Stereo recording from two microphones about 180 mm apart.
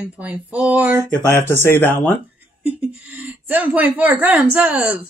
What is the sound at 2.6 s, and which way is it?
A child's voice, 10° right (ahead or behind).